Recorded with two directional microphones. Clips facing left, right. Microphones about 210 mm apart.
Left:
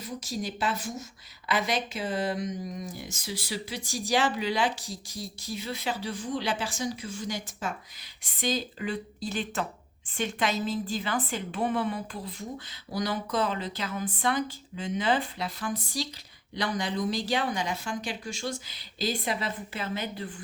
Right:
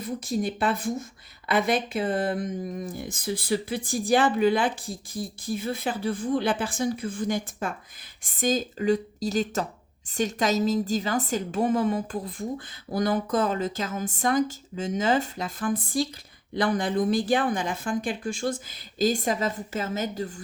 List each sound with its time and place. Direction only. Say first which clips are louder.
0.0 s speech: right 6 dB; 55° right (ahead or behind)